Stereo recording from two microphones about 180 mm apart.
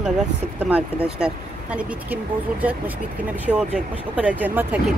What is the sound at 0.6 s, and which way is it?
Speech, 10° right (ahead or behind).